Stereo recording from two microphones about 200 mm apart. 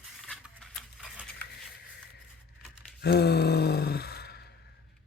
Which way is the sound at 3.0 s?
55° left (ahead or behind).